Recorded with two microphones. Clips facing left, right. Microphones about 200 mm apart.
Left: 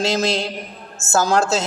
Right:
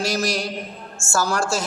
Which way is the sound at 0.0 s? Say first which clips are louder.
Left 3 dB; 25° left (ahead or behind).